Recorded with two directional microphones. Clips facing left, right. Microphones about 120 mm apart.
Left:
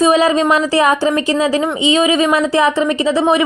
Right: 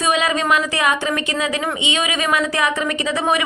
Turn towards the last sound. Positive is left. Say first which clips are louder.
# left 6 dB
turn(degrees=30)  # may be behind; listen again after turning